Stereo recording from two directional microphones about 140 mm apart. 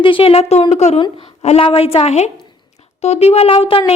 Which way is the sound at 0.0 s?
40° left (ahead or behind).